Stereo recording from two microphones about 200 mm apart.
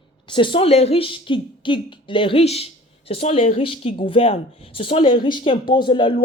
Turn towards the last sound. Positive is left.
turn(degrees=20)  # may be behind; listen again after turning